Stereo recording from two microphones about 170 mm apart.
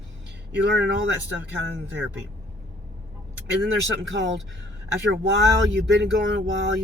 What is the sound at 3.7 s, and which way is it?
Speech, 90° right.